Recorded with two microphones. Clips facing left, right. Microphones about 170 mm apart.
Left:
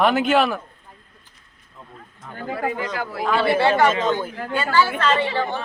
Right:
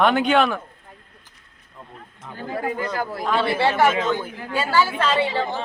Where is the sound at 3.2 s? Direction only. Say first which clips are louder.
Left 3 dB; centre (ahead or behind).